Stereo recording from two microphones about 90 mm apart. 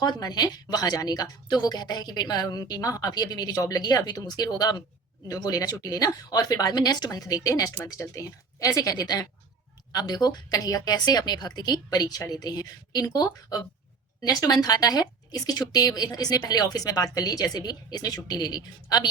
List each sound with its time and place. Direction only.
0.0 s speech: 50° left (ahead or behind)